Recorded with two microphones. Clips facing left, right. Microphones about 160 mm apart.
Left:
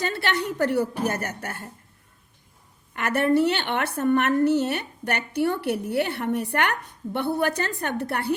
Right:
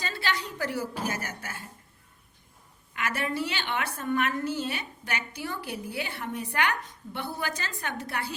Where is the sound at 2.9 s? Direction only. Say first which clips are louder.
Left 10 dB; 55° left (ahead or behind).